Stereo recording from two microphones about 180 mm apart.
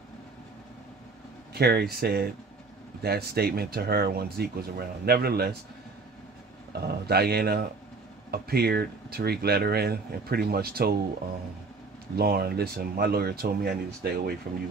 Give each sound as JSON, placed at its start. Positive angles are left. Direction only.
{"t": 1.5, "sound": "speech", "side_deg": -60}
{"t": 6.7, "sound": "speech", "side_deg": -60}
{"t": 12.2, "sound": "speech", "side_deg": -60}